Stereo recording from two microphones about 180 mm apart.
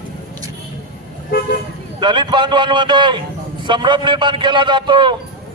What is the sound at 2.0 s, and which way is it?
A man's voice, 25° right (ahead or behind).